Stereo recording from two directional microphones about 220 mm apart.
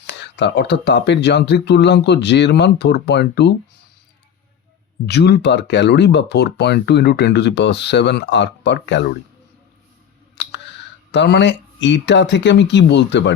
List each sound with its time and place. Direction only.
0.1 s speech: 55° left (ahead or behind)
5.0 s speech: 50° left (ahead or behind)
10.3 s clicking: 55° left (ahead or behind)
11.1 s speech: 50° left (ahead or behind)